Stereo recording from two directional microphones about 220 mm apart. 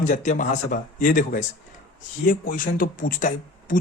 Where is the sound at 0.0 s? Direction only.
35° left (ahead or behind).